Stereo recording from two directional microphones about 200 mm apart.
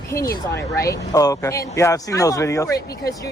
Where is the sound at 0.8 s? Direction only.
15° left (ahead or behind).